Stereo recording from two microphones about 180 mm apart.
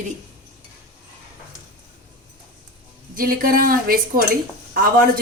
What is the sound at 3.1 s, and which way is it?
A woman's voice, 55° right (ahead or behind).